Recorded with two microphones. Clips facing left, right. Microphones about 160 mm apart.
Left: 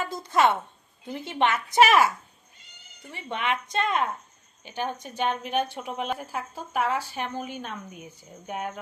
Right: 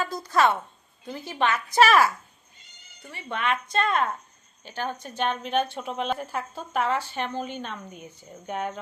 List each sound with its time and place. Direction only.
0.0 s a woman's voice: 20° left (ahead or behind); by 8.8 s 5° left (ahead or behind)